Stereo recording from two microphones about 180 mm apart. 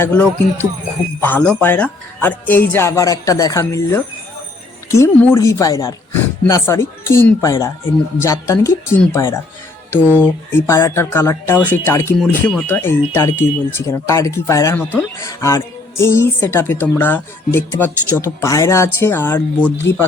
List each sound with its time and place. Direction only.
0.0 s a woman's voice: 10° left (ahead or behind)
12.2 s a woman's voice: 5° left (ahead or behind)